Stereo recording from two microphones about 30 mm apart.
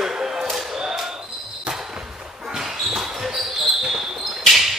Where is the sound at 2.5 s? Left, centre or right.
Centre.